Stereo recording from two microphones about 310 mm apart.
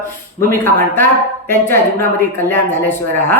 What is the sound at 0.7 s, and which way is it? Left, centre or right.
A woman's voice, centre.